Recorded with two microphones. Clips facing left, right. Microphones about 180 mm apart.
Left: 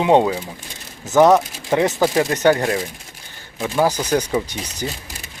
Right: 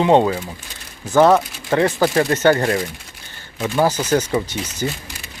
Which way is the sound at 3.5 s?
Centre (ahead or behind).